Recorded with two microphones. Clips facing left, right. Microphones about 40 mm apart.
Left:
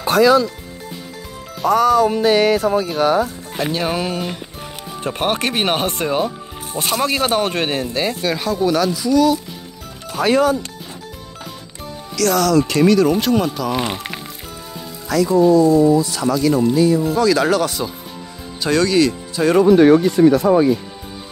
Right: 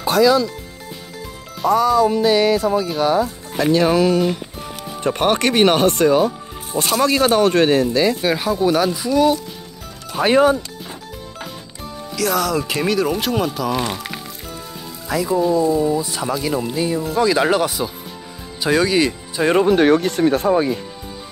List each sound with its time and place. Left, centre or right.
0.0 s speech: left
1.7 s speech: left
3.0 s speech: left
3.5 s speech: centre
8.2 s speech: centre; by 10.6 s right
12.2 s speech: centre
13.7 s speech: left
15.0 s speech: centre
19.6 s speech: right